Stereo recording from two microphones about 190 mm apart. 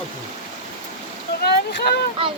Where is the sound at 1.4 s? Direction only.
55° left (ahead or behind).